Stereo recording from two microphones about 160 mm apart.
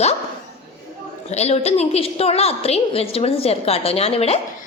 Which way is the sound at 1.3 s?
40° left (ahead or behind).